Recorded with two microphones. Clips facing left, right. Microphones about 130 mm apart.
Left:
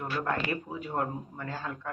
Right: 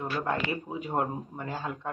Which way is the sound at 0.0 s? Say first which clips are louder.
Right 1 dB; 20° right (ahead or behind).